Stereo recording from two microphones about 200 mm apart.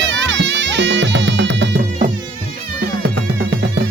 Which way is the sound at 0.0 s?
65° right (ahead or behind).